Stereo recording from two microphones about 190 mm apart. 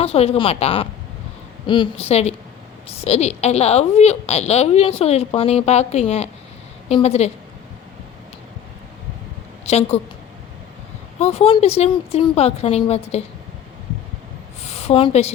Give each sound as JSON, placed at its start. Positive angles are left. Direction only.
{"t": 0.0, "sound": "a woman's voice", "side_deg": 30}
{"t": 9.6, "sound": "a woman's voice", "side_deg": 35}
{"t": 11.2, "sound": "a woman's voice", "side_deg": 30}
{"t": 14.6, "sound": "a sound", "side_deg": 35}